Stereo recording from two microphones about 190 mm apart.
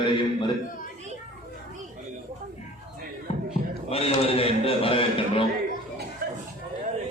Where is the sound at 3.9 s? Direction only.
30° left (ahead or behind).